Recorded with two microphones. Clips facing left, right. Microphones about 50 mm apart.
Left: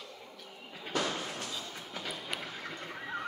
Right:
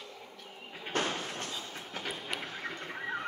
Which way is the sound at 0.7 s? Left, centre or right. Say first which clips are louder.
Right 1 dB; right.